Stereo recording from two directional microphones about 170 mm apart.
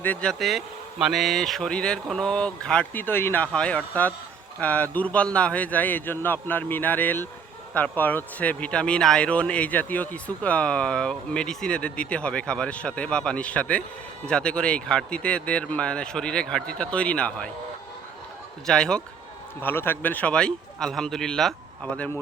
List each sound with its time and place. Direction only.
0.0 s a man's voice: 10° left (ahead or behind)
18.6 s a man's voice: 5° left (ahead or behind)